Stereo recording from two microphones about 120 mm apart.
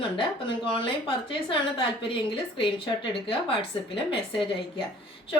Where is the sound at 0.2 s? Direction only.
45° left (ahead or behind).